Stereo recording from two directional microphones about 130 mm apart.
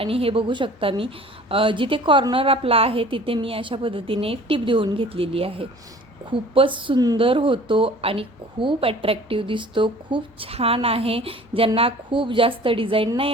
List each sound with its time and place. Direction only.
0.0 s a woman's voice: 45° right (ahead or behind)